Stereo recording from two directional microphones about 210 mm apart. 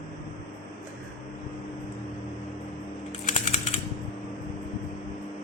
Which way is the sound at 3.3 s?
30° left (ahead or behind).